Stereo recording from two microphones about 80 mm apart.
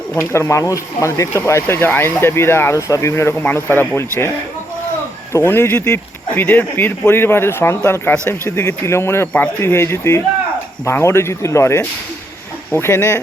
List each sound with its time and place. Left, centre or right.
0.2 s speech: left
2.7 s speech: left
3.4 s speech: left
5.3 s speech: left